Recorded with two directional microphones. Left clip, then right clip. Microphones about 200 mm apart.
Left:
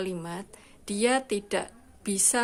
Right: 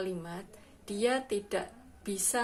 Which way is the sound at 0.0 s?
40° left (ahead or behind).